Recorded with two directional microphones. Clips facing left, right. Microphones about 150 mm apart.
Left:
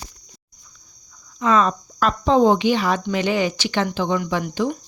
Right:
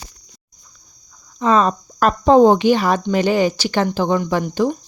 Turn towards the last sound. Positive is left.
turn(degrees=-35)  # may be behind; listen again after turning